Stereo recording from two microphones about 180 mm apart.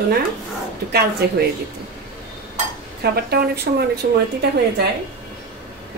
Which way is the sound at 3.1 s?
60° right (ahead or behind).